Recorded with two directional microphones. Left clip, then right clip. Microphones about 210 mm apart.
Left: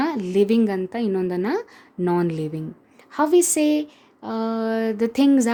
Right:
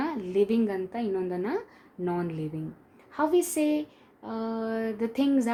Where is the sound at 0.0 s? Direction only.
55° left (ahead or behind).